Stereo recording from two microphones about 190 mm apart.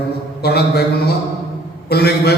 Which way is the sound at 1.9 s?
55° left (ahead or behind).